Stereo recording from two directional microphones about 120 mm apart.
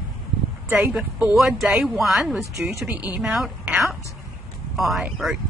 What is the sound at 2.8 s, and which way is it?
Speech, 15° right (ahead or behind).